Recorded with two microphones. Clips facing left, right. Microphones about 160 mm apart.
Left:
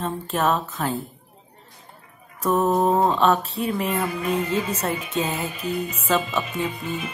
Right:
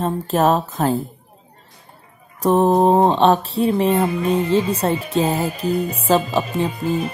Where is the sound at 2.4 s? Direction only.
30° right (ahead or behind).